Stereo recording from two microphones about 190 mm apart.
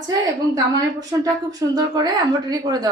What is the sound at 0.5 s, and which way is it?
Speech, 20° right (ahead or behind).